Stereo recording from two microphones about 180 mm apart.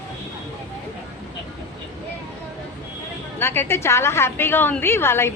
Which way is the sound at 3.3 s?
10° left (ahead or behind).